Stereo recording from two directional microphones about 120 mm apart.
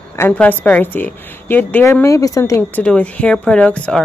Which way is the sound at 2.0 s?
30° left (ahead or behind).